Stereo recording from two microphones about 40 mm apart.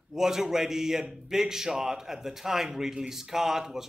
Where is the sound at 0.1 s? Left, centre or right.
Centre.